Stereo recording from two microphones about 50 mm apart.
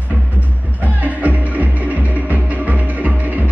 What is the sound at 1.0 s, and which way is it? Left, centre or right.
Music, right.